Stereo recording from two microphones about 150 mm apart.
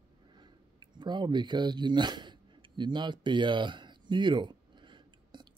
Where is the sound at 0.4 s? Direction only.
30° right (ahead or behind).